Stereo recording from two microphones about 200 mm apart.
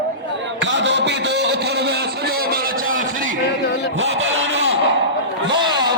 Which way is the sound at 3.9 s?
60° right (ahead or behind).